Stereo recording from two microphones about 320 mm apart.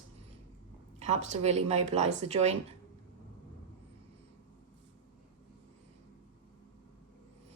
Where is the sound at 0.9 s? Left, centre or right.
Right.